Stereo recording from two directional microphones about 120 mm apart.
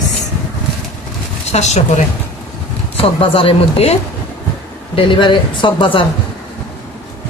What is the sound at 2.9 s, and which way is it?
A woman's voice, 50° left (ahead or behind).